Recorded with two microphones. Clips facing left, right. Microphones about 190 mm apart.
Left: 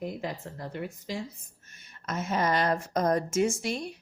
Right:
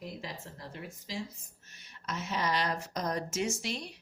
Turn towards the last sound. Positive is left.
turn(degrees=50)  # may be behind; listen again after turning